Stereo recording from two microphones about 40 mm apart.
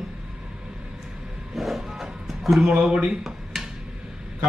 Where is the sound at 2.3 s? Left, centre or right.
Centre.